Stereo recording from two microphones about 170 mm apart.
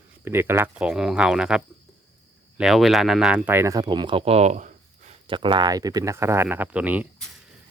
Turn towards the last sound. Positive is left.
turn(degrees=-10)  # may be behind; listen again after turning